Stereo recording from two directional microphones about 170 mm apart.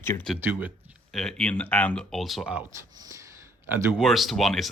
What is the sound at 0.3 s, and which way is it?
Speech, 10° right (ahead or behind).